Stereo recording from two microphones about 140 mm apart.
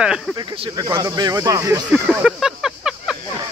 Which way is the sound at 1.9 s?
5° right (ahead or behind).